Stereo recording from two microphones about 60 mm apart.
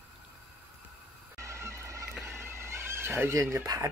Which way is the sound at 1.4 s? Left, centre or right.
Right.